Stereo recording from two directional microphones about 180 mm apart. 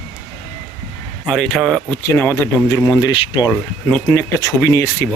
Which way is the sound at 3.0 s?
25° left (ahead or behind).